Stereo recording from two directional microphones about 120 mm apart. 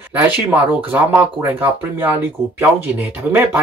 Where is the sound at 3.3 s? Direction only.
15° right (ahead or behind).